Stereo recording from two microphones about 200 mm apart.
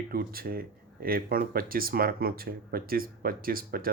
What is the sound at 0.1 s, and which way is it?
Speech, 50° right (ahead or behind).